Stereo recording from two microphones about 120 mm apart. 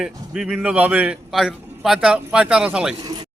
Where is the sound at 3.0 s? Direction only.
35° right (ahead or behind).